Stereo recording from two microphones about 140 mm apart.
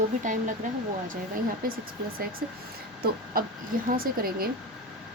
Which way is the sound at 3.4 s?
90° right.